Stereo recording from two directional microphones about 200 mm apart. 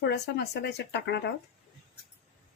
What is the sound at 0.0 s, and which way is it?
Speech, 55° left (ahead or behind).